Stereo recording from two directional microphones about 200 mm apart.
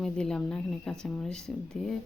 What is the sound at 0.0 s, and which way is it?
Speech, 5° left (ahead or behind).